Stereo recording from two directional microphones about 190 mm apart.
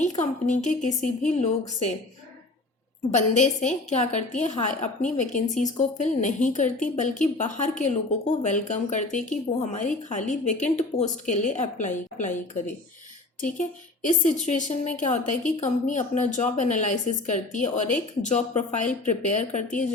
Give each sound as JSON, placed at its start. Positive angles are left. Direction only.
{"t": 0.0, "sound": "a woman's voice", "side_deg": 40}
{"t": 3.2, "sound": "a woman's voice", "side_deg": 40}
{"t": 13.4, "sound": "a woman's voice", "side_deg": 45}